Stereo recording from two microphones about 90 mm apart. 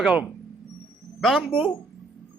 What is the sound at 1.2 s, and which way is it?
Speech, 5° left (ahead or behind).